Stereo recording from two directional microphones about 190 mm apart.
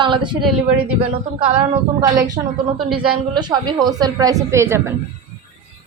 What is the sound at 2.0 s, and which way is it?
A woman's voice, 20° right (ahead or behind).